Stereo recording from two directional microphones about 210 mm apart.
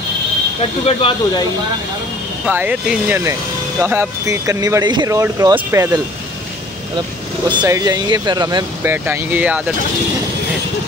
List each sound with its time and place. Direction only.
0.6 s speech: 25° left (ahead or behind)
2.4 s speech: 5° right (ahead or behind)
7.4 s speech: 20° right (ahead or behind)